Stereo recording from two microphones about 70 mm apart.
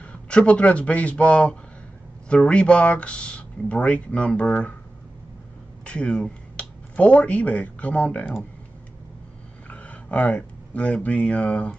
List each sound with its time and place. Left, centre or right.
0.0 s speech: centre
5.9 s speech: centre
9.7 s speech: left